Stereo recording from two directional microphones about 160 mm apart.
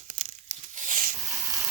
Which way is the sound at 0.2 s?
45° right (ahead or behind).